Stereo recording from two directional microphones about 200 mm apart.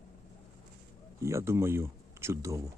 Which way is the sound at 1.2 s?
15° right (ahead or behind).